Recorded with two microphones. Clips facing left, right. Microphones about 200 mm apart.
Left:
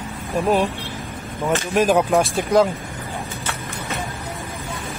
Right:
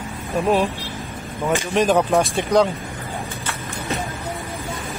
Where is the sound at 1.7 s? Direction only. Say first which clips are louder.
Left 1 dB; 5° left (ahead or behind).